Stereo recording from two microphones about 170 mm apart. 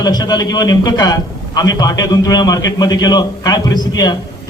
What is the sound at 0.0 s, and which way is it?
A man's voice, 25° left (ahead or behind).